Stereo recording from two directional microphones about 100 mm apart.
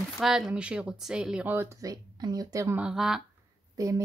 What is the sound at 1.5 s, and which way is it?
Speech, 25° right (ahead or behind).